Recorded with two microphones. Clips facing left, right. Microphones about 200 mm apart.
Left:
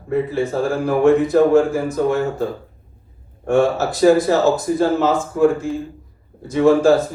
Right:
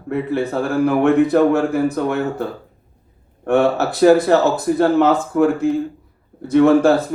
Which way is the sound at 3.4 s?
60° right (ahead or behind).